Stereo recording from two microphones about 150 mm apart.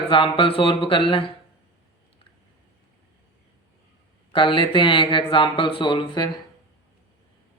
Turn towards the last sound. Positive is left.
turn(degrees=30)  # may be behind; listen again after turning